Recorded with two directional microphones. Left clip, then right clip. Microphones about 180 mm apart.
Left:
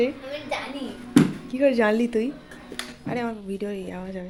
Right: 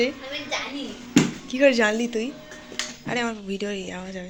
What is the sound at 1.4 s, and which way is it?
Speech, 5° left (ahead or behind).